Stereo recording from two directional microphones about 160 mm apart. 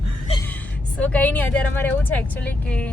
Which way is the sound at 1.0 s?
10° left (ahead or behind).